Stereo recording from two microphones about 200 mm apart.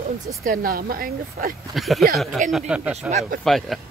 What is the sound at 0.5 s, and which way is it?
Speech, 45° right (ahead or behind).